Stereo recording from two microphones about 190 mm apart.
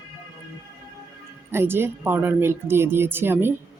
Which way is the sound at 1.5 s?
10° right (ahead or behind).